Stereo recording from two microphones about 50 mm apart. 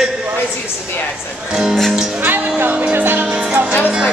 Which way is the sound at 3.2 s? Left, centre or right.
Right.